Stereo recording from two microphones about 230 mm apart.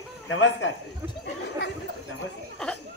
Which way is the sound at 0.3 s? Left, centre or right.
Left.